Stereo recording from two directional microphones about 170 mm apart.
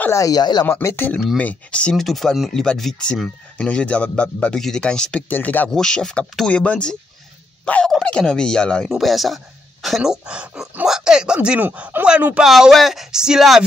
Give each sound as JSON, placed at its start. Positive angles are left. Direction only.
{"t": 0.0, "sound": "speech", "side_deg": 20}
{"t": 0.7, "sound": "speech", "side_deg": 15}